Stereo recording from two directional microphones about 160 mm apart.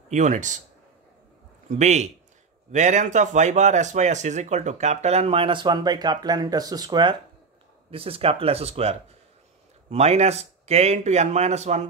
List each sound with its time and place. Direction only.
0.1 s speech: 50° right (ahead or behind)
1.7 s speech: 45° right (ahead or behind)